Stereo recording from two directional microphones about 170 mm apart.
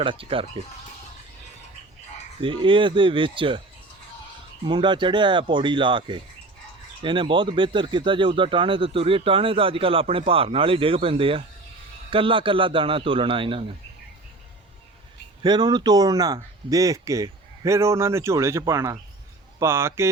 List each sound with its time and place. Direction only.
0.0 s speech: 30° right (ahead or behind)
2.4 s speech: 30° right (ahead or behind)
4.6 s speech: 30° right (ahead or behind)
15.4 s speech: 25° right (ahead or behind)